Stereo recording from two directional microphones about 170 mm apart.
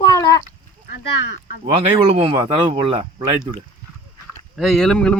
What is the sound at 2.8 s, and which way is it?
Speech, 30° right (ahead or behind).